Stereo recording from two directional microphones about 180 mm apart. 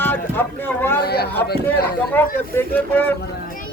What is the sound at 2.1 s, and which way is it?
Speech, 10° left (ahead or behind).